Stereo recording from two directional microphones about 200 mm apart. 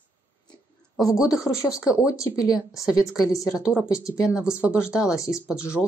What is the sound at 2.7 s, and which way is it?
Speech, 5° right (ahead or behind).